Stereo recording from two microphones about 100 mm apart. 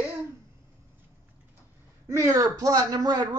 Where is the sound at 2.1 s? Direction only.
30° right (ahead or behind).